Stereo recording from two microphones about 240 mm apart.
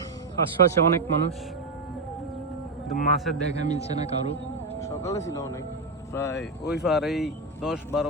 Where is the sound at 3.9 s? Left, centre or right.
Left.